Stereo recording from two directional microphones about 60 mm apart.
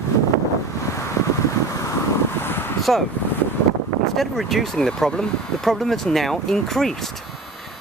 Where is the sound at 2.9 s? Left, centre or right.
Centre.